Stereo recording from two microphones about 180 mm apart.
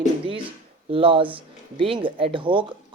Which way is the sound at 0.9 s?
30° right (ahead or behind).